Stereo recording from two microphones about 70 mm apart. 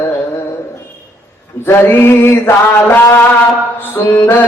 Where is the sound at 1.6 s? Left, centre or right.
Left.